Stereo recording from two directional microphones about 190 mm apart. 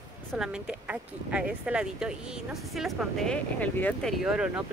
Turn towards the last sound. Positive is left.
turn(degrees=-5)  # may be behind; listen again after turning